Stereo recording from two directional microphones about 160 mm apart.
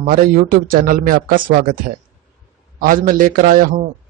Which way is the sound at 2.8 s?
60° right (ahead or behind).